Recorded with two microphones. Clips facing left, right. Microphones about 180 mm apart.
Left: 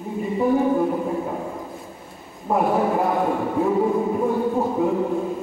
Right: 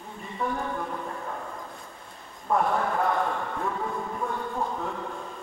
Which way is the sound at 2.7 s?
20° left (ahead or behind).